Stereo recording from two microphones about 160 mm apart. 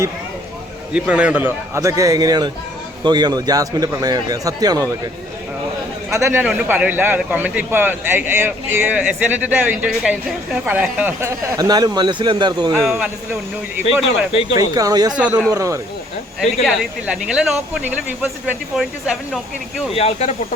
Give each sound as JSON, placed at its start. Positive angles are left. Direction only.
{"t": 0.9, "sound": "a man's voice", "side_deg": -5}
{"t": 6.1, "sound": "a man's voice", "side_deg": -15}
{"t": 12.8, "sound": "speech", "side_deg": -5}
{"t": 14.3, "sound": "speech", "side_deg": 35}
{"t": 14.7, "sound": "speech", "side_deg": -25}
{"t": 15.2, "sound": "a man's voice", "side_deg": -10}
{"t": 15.4, "sound": "speech", "side_deg": -20}
{"t": 16.6, "sound": "speech", "side_deg": -5}
{"t": 19.9, "sound": "speech", "side_deg": 40}